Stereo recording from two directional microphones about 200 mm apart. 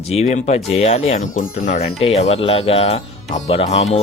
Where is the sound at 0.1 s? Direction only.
35° left (ahead or behind).